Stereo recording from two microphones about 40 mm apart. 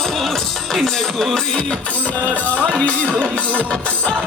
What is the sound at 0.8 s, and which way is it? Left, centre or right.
Music, centre.